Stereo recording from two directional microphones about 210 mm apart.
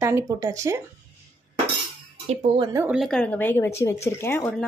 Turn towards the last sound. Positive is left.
turn(degrees=5)  # may be behind; listen again after turning